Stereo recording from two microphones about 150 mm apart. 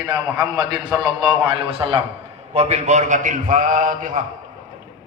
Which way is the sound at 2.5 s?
45° right (ahead or behind).